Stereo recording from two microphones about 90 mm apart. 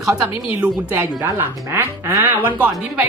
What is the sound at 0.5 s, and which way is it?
Speech, 15° right (ahead or behind).